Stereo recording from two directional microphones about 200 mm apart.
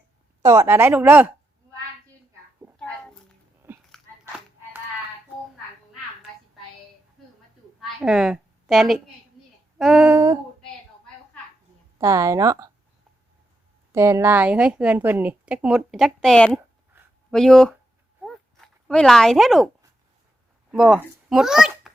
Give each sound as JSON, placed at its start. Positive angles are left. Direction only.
{"t": 0.4, "sound": "a woman's voice", "side_deg": -15}
{"t": 3.6, "sound": "biting", "side_deg": -10}
{"t": 7.8, "sound": "a sound", "side_deg": -5}
{"t": 9.7, "sound": "female singing", "side_deg": -5}
{"t": 11.9, "sound": "a woman's voice", "side_deg": -15}
{"t": 13.9, "sound": "a woman's voice", "side_deg": -15}
{"t": 17.3, "sound": "female singing", "side_deg": 5}
{"t": 18.2, "sound": "a sound", "side_deg": 0}
{"t": 20.7, "sound": "a child's voice", "side_deg": -5}